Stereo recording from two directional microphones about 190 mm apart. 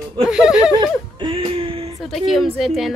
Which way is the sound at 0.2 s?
5° right (ahead or behind).